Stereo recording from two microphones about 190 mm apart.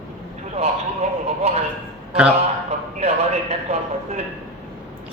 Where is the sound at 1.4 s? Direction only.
35° right (ahead or behind).